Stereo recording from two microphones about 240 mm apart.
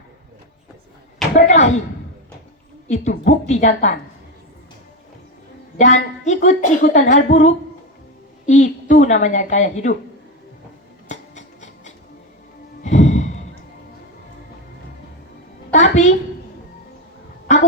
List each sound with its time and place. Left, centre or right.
1.5 s a woman's voice: left
2.9 s a woman's voice: left
5.7 s speech: left
11.1 s music: left
15.7 s a sound: left
17.5 s a sound: left